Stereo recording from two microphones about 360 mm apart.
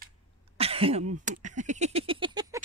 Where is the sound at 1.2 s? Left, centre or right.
Right.